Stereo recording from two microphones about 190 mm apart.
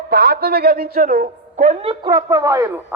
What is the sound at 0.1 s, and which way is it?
A woman's voice, 55° right (ahead or behind).